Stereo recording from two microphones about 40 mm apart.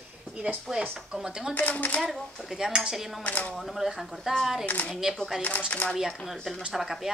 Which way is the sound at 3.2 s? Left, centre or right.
Left.